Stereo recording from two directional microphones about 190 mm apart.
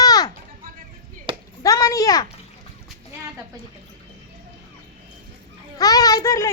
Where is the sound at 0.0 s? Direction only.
20° left (ahead or behind).